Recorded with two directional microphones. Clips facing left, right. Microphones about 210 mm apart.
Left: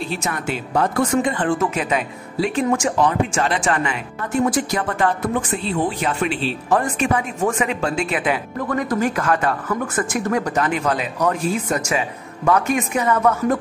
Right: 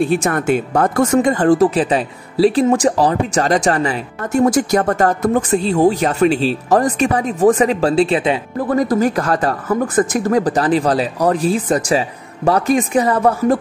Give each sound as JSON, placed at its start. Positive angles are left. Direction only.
{"t": 0.0, "sound": "speech", "side_deg": -50}